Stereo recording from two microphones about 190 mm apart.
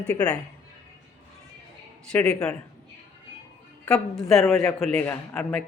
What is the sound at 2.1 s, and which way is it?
Speech, 5° left (ahead or behind).